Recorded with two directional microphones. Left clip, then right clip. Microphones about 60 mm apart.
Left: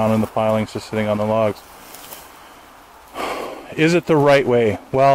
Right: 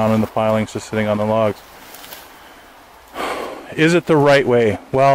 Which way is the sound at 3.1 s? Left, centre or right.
Right.